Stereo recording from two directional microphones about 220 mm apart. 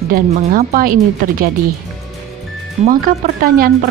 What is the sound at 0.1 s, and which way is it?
A woman's voice, 40° right (ahead or behind).